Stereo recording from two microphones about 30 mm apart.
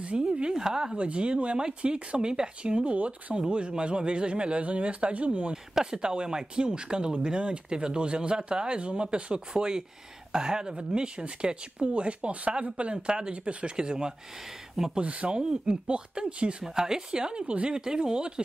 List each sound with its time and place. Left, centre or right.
0.0 s a woman's voice: right
0.5 s speech: right
0.9 s speech: right
3.3 s speech: right
5.5 s speech: right
12.9 s speech: right
13.5 s speech: right
13.7 s speech: right
15.0 s speech: right
16.6 s speech: centre
17.5 s speech: right
17.7 s speech: right